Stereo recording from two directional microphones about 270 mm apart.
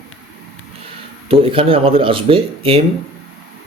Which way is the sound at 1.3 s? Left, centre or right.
Centre.